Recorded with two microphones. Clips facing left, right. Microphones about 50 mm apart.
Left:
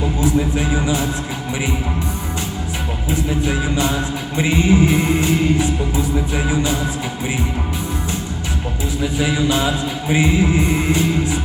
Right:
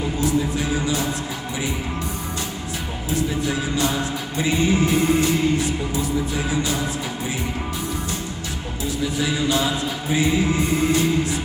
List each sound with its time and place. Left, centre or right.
0.2 s music: left
3.1 s music: left
9.1 s music: left